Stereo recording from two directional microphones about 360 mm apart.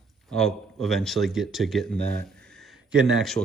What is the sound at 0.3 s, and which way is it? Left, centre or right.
Speech, centre.